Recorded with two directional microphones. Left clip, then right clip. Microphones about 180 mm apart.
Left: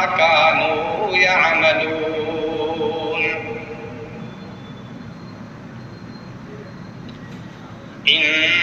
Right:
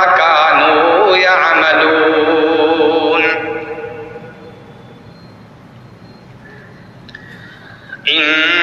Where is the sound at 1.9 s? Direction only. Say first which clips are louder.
Right 12 dB; 50° right (ahead or behind).